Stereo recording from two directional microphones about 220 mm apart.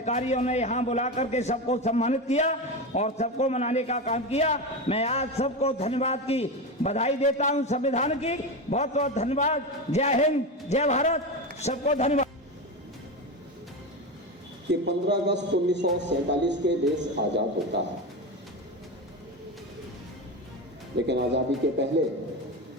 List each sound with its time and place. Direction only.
0.0 s a man's voice: 30° left (ahead or behind)
14.7 s a man's voice: 50° right (ahead or behind)
20.9 s a man's voice: 50° right (ahead or behind)